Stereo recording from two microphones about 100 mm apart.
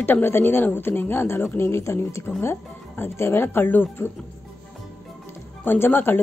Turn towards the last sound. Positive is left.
turn(degrees=20)  # may be behind; listen again after turning